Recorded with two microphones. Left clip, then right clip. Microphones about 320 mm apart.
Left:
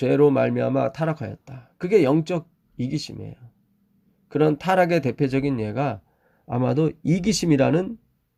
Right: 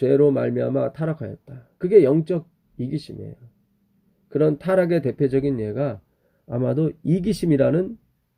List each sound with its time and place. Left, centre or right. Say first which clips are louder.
0.0 s speech: even; left
4.3 s speech: even; left